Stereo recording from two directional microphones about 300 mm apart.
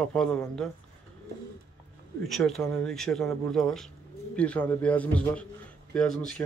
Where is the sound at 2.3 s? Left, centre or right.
Centre.